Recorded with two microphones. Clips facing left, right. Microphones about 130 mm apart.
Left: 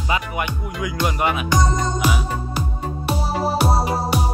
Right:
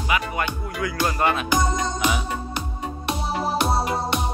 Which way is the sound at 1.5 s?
5° right (ahead or behind).